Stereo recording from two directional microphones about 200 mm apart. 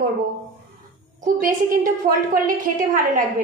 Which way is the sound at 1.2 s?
40° right (ahead or behind).